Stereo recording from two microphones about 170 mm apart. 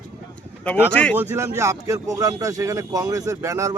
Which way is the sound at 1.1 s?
10° right (ahead or behind).